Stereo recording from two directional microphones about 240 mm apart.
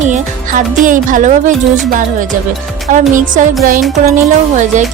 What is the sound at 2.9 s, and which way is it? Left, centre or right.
Speech, right.